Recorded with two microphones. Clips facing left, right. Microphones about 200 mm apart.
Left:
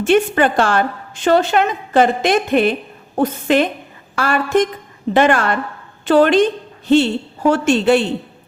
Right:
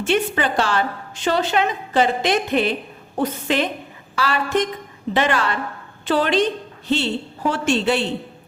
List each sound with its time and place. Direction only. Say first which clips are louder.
0.0 s a woman's voice: left 6 dB; 50° left (ahead or behind)